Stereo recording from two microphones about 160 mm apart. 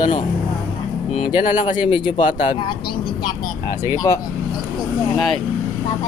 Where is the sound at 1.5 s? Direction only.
10° right (ahead or behind).